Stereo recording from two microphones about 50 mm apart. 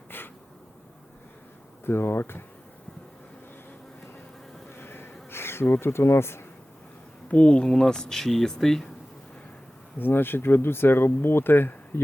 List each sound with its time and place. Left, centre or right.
0.1 s a sound: left
1.8 s speech: left
4.7 s bee: left
5.6 s speech: left
7.3 s speech: left
10.0 s speech: left